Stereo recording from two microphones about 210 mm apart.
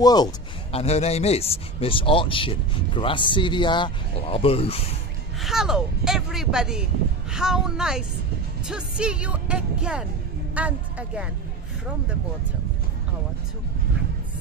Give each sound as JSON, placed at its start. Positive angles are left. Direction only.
{"t": 0.0, "sound": "speech", "side_deg": 20}
{"t": 5.4, "sound": "a man's voice", "side_deg": 0}